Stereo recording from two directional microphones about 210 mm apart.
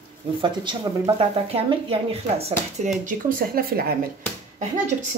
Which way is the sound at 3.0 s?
45° right (ahead or behind).